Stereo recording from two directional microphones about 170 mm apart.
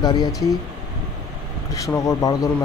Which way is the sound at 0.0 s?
25° left (ahead or behind).